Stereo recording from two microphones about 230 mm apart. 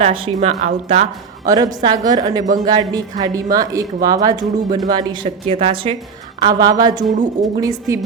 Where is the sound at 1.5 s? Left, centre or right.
Centre.